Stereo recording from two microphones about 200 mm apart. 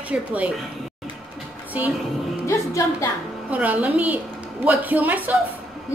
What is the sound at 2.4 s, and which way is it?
Speech, 15° left (ahead or behind).